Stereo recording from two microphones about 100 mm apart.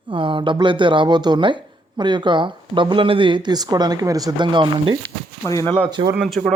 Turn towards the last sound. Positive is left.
turn(degrees=0)  # may be behind; listen again after turning